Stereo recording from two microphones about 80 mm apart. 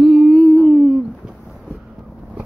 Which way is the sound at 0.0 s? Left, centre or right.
Centre.